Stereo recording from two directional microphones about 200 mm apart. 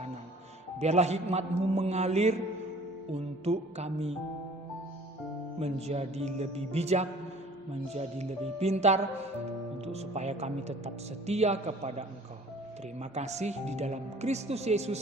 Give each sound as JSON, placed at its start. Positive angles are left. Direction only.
{"t": 0.8, "sound": "speech", "side_deg": -35}
{"t": 5.5, "sound": "speech", "side_deg": -30}